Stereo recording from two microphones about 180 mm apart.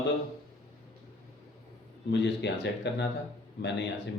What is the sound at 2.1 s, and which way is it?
Speech, 75° left (ahead or behind).